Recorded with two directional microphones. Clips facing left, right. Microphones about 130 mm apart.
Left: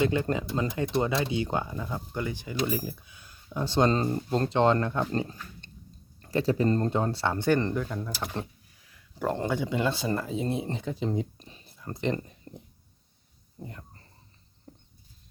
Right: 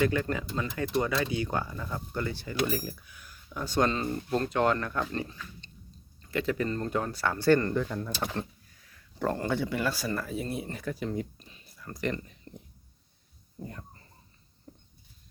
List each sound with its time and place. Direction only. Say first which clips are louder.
0.0 s speech: left 2 dB; 25° left (ahead or behind)
5.3 s dog: left 1 dB; 50° left (ahead or behind)
6.2 s speech: left 5 dB; 35° left (ahead or behind)
11.3 s a sound: left 2 dB; 30° left (ahead or behind)
12.5 s speech: left 2 dB; 15° left (ahead or behind)